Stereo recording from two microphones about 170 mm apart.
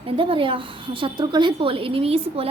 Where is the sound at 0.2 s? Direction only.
30° right (ahead or behind).